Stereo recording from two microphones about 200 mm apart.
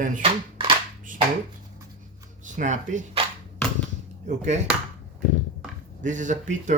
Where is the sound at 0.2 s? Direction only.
25° right (ahead or behind).